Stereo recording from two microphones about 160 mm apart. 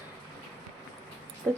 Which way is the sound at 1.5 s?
5° left (ahead or behind).